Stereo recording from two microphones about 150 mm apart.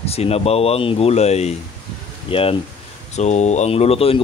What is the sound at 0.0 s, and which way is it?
Speech, 40° left (ahead or behind).